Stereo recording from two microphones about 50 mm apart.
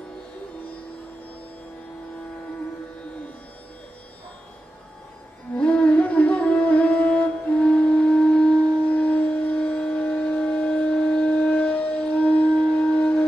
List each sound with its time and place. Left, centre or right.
5.6 s music: centre
8.2 s shofar: left